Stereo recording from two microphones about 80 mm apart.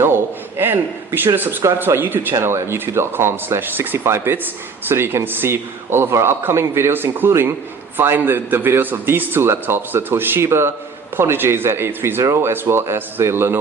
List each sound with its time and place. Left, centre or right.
0.0 s a man's voice: right